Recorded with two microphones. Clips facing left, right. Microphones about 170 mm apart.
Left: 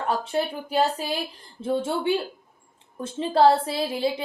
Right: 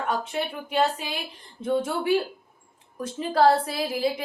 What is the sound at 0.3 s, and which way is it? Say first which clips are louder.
A woman's voice: left 4 dB; 35° left (ahead or behind).